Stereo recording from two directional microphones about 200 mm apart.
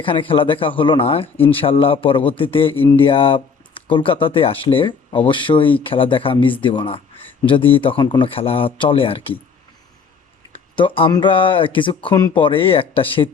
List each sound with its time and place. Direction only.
0.0 s speech: 25° left (ahead or behind)
2.7 s speech: 10° left (ahead or behind)
3.0 s speech: 25° left (ahead or behind)
10.5 s speech: 25° left (ahead or behind)